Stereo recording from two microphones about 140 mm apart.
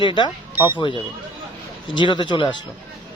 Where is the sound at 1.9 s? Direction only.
35° left (ahead or behind).